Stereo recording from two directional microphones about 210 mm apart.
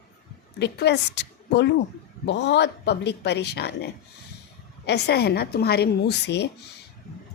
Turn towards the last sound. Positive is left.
turn(degrees=55)  # may be behind; listen again after turning